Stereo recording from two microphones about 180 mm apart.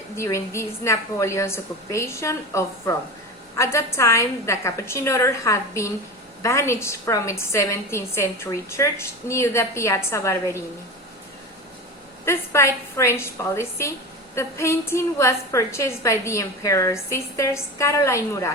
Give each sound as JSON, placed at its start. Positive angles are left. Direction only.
{"t": 0.2, "sound": "a woman's voice", "side_deg": 15}
{"t": 12.2, "sound": "a woman's voice", "side_deg": 15}